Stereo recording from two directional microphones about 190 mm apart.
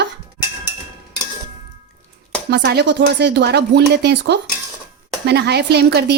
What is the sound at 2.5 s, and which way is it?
Speech, 65° right (ahead or behind).